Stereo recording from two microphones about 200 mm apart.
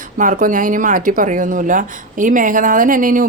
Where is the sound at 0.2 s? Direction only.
40° right (ahead or behind).